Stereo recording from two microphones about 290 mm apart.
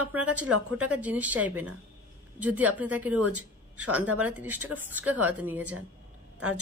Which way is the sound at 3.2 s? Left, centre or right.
Right.